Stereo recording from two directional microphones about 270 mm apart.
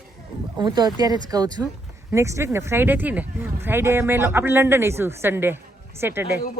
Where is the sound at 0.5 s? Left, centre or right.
Centre.